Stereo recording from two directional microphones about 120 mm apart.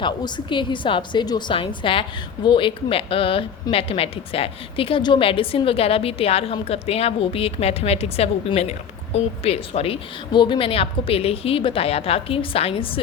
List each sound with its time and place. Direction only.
0.0 s a woman's voice: 40° left (ahead or behind); by 10.0 s 55° left (ahead or behind)
10.3 s a woman's voice: 40° left (ahead or behind)